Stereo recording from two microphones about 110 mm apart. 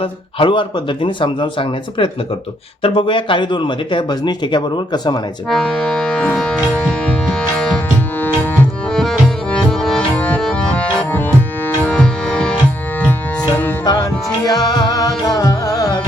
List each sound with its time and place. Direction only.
0.0 s speech: 55° left (ahead or behind)
5.5 s music: centre (ahead or behind)
8.9 s music: 5° left (ahead or behind)
13.8 s music: 35° left (ahead or behind)